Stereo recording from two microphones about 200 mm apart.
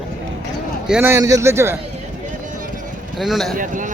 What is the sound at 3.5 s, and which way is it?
Speech, 40° right (ahead or behind).